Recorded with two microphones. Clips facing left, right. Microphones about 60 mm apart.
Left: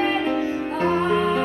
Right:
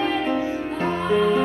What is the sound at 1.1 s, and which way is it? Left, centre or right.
Music, centre.